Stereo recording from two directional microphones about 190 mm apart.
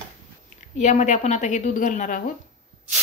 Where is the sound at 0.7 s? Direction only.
40° left (ahead or behind).